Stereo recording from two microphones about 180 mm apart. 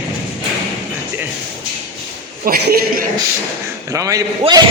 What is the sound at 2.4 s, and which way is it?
Speech, 55° right (ahead or behind).